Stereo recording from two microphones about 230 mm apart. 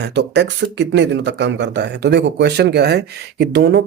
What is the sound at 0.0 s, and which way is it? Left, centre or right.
Speech, right.